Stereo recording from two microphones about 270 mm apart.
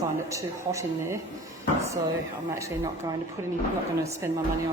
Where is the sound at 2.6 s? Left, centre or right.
Centre.